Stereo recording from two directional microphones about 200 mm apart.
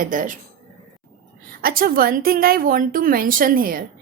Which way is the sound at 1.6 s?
45° right (ahead or behind).